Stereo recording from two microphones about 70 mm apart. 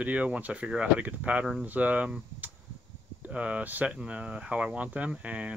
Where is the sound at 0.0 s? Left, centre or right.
Centre.